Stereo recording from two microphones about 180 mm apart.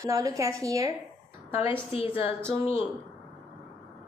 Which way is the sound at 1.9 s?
30° left (ahead or behind).